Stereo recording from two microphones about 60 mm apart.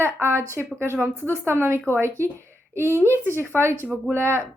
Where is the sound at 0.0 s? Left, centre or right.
Right.